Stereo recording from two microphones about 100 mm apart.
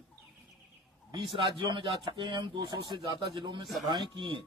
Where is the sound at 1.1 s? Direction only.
55° right (ahead or behind).